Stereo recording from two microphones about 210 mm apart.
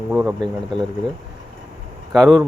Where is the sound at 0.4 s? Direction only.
20° right (ahead or behind).